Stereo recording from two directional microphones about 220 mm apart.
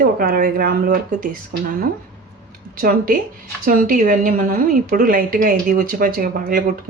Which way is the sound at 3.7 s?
40° right (ahead or behind).